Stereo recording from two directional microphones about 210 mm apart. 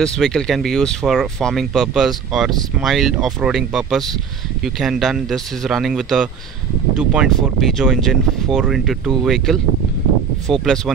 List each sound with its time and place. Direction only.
0.0 s speech: centre (ahead or behind)